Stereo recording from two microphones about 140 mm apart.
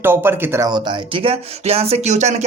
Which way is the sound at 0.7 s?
30° right (ahead or behind).